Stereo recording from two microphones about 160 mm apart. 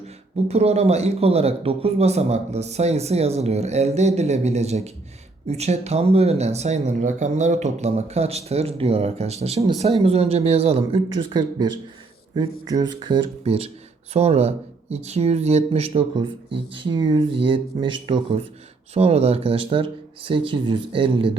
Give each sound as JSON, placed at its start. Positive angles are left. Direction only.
{"t": 0.4, "sound": "a man's voice", "side_deg": -40}